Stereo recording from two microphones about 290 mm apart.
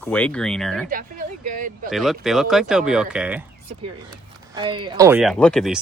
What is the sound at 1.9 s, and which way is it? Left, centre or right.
Speech, centre.